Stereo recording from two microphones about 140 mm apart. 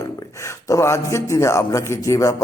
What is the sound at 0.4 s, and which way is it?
A man's voice, 20° left (ahead or behind).